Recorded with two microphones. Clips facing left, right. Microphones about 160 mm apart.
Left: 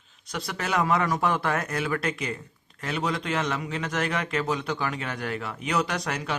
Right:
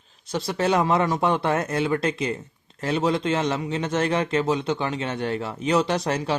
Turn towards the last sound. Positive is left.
turn(degrees=-30)  # may be behind; listen again after turning